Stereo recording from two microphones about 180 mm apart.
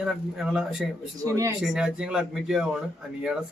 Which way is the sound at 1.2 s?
15° right (ahead or behind).